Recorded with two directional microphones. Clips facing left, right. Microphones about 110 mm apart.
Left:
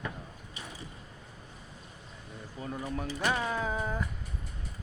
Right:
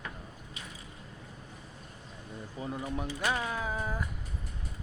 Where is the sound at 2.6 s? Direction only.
15° right (ahead or behind).